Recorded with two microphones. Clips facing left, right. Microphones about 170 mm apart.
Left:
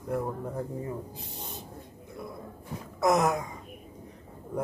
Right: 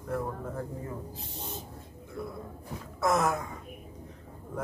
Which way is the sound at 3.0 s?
15° left (ahead or behind).